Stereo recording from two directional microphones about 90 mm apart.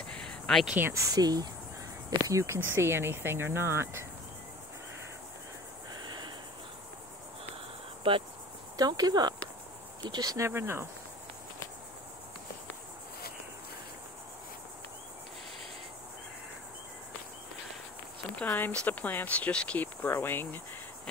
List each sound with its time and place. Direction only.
0.1 s a sound: 10° left (ahead or behind)
0.9 s speech: 40° right (ahead or behind)
6.0 s a sound: 55° right (ahead or behind)
8.0 s speech: 90° right
8.7 s speech: 45° right (ahead or behind)
10.3 s speech: 30° right (ahead or behind)
18.3 s speech: 15° left (ahead or behind)